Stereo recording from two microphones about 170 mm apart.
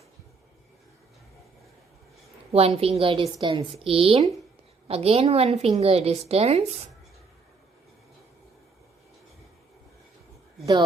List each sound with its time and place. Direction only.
2.5 s a woman's voice: 35° right (ahead or behind)